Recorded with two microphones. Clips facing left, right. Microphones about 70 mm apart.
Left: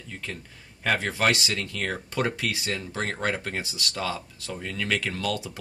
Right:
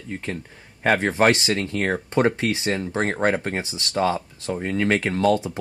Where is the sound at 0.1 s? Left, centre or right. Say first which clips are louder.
Right 7 dB; right.